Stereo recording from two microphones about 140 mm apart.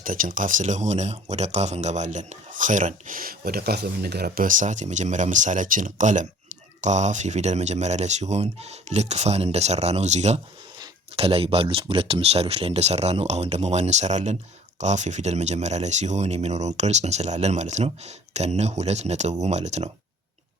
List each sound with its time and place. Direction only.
0.0 s speech: 75° right (ahead or behind)
4.3 s speech: 75° right (ahead or behind); by 19.9 s 50° right (ahead or behind)